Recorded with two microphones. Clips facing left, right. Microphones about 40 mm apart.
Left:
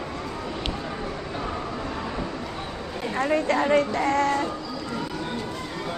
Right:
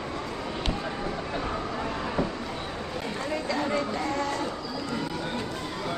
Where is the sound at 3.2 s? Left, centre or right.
Left.